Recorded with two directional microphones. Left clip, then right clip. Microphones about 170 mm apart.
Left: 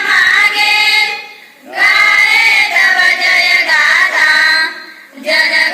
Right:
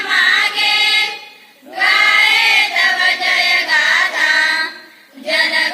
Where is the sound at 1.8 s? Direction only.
20° right (ahead or behind).